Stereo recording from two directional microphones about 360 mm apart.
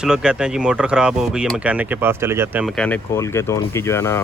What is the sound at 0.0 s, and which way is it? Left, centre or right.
Speech, centre.